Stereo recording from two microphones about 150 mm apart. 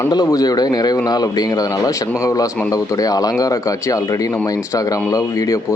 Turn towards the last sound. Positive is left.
turn(degrees=25)  # may be behind; listen again after turning